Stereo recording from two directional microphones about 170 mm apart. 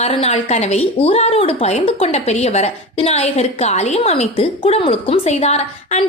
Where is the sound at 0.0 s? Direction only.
40° left (ahead or behind).